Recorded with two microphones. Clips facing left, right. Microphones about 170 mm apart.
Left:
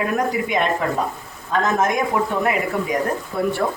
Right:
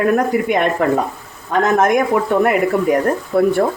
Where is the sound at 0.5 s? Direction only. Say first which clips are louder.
Right 4 dB; 55° right (ahead or behind).